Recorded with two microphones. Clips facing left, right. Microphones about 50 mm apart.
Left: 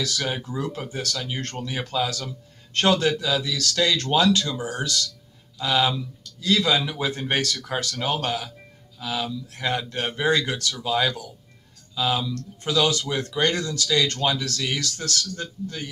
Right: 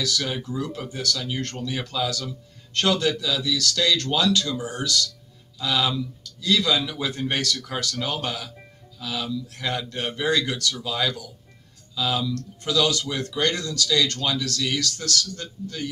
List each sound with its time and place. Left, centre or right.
0.0 s a man's voice: left